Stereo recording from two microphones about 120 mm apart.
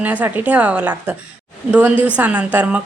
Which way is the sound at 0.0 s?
15° right (ahead or behind).